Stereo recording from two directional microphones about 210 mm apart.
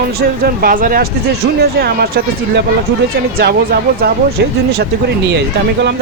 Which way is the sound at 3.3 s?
45° right (ahead or behind).